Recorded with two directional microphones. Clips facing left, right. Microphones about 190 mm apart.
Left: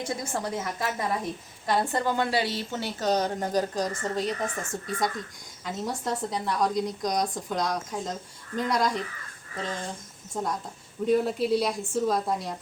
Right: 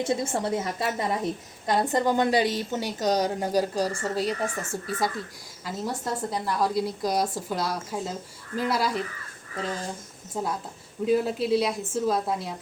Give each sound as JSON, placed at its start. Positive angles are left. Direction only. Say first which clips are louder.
{"t": 0.0, "sound": "a woman's voice", "louder": "right 5 dB", "side_deg": -25}